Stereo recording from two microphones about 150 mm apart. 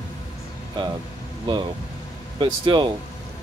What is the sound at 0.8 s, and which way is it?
Speech, 30° right (ahead or behind).